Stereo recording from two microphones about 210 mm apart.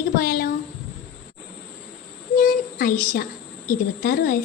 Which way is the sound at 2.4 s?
40° left (ahead or behind).